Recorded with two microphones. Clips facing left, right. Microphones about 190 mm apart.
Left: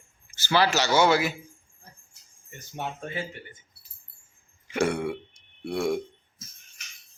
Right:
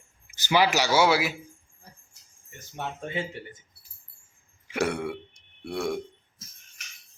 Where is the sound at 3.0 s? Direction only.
25° right (ahead or behind).